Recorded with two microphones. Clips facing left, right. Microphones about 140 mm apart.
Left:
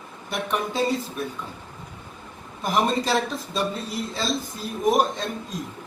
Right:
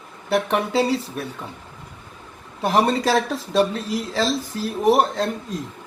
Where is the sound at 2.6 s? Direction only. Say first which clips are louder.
Right 4 dB; 75° right (ahead or behind).